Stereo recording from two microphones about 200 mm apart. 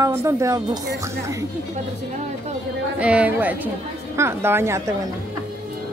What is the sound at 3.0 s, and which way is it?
Speech, 5° right (ahead or behind).